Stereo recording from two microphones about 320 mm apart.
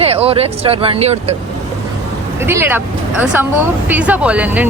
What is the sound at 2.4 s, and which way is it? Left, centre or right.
Speech, centre.